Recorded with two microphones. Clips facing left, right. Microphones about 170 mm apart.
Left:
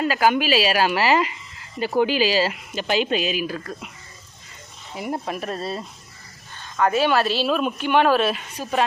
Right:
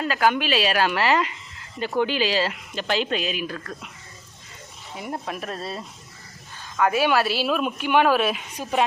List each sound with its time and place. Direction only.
0.0 s speech: 5° left (ahead or behind)
4.9 s speech: 5° left (ahead or behind); by 8.8 s 15° right (ahead or behind)